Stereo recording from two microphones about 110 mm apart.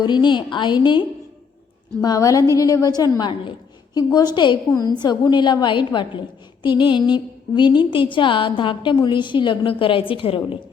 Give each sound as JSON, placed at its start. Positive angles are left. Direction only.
{"t": 0.0, "sound": "a woman's voice", "side_deg": 45}
{"t": 2.0, "sound": "a woman's voice", "side_deg": 35}